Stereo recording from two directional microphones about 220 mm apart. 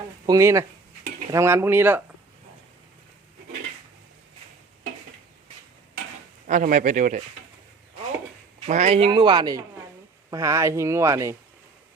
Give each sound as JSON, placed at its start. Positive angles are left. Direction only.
{"t": 0.3, "sound": "speech", "side_deg": -15}
{"t": 6.5, "sound": "speech", "side_deg": -35}
{"t": 8.6, "sound": "speech", "side_deg": -30}